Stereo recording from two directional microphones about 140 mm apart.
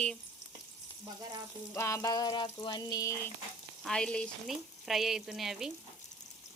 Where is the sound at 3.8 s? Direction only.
5° left (ahead or behind).